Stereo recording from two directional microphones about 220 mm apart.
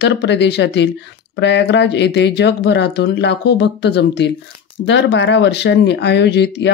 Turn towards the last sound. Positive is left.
turn(degrees=50)  # may be behind; listen again after turning